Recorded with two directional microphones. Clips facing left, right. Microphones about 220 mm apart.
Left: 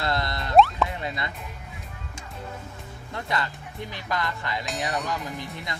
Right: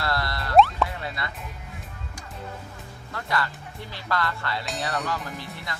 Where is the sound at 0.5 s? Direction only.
Centre (ahead or behind).